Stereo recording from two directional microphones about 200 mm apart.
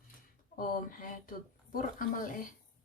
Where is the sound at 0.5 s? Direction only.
45° left (ahead or behind).